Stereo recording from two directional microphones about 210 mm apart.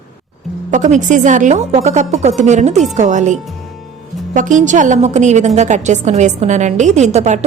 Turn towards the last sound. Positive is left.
turn(degrees=-35)  # may be behind; listen again after turning